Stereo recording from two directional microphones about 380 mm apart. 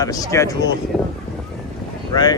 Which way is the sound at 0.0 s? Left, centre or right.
Centre.